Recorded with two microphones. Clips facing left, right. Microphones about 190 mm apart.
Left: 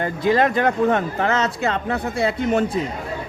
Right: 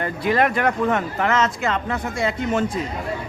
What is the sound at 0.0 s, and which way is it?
Speech, 25° left (ahead or behind).